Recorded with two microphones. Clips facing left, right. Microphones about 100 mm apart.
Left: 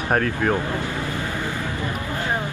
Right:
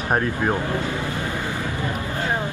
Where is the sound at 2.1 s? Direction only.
20° right (ahead or behind).